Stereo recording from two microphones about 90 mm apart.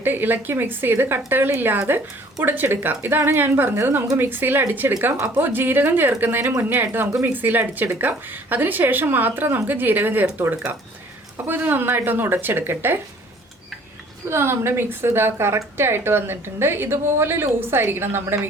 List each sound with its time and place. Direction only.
0.0 s a woman's voice: 20° right (ahead or behind)
14.3 s a woman's voice: 30° right (ahead or behind)